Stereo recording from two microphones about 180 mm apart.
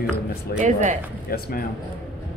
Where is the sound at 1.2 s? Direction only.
55° left (ahead or behind).